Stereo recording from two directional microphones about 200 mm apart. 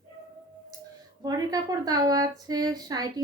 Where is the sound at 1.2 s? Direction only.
20° right (ahead or behind).